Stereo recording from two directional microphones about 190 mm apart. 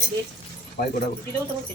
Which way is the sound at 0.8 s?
45° left (ahead or behind).